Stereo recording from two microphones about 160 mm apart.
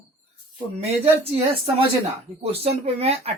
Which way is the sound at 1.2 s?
35° right (ahead or behind).